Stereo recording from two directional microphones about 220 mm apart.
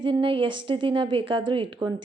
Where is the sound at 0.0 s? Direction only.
25° right (ahead or behind).